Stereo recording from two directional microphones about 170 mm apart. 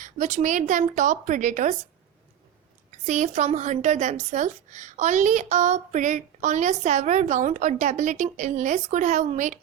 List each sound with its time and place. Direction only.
0.0 s a woman's voice: 45° right (ahead or behind)
3.1 s a woman's voice: 45° right (ahead or behind)